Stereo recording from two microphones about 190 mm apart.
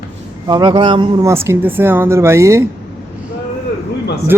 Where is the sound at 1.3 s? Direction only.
15° right (ahead or behind).